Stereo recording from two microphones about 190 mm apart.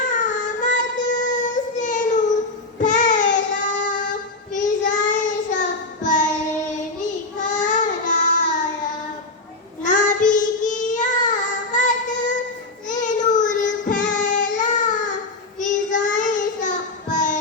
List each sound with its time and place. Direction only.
0.0 s child singing: 40° left (ahead or behind)
9.8 s child singing: 40° left (ahead or behind)